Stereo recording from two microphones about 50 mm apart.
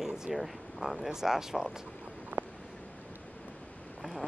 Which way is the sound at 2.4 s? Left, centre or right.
Right.